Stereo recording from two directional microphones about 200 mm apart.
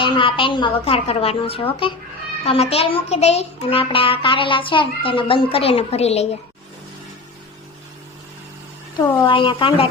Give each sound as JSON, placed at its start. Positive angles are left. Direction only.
{"t": 0.0, "sound": "a child's voice", "side_deg": 25}
{"t": 9.0, "sound": "a child's voice", "side_deg": 25}